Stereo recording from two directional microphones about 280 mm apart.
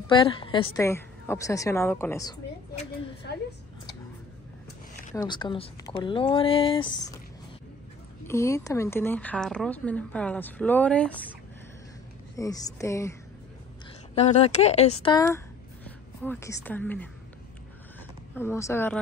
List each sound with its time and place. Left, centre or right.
0.1 s a woman's voice: centre
2.7 s speech: left
5.1 s a woman's voice: centre
8.3 s speech: centre
12.4 s a woman's voice: centre
14.1 s speech: left; by 17.1 s centre
18.3 s a woman's voice: centre